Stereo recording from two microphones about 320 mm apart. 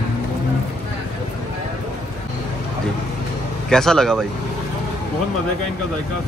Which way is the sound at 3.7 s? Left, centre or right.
Centre.